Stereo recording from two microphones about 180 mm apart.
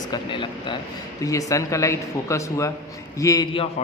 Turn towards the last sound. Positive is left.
turn(degrees=20)  # may be behind; listen again after turning